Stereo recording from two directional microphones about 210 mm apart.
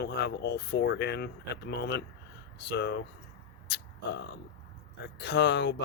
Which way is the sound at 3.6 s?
55° left (ahead or behind).